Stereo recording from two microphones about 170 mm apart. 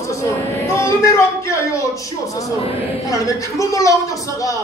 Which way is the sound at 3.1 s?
20° left (ahead or behind).